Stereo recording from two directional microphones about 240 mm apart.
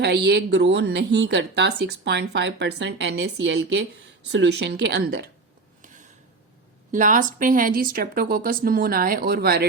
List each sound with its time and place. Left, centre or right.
0.0 s speech: right
5.8 s a sound: right
6.9 s speech: right